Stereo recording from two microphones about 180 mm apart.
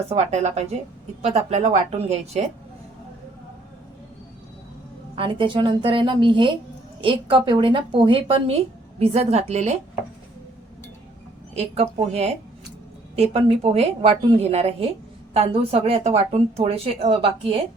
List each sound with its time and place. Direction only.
0.1 s speech: 40° right (ahead or behind)
5.1 s a woman's voice: 30° right (ahead or behind)
11.5 s speech: 35° right (ahead or behind)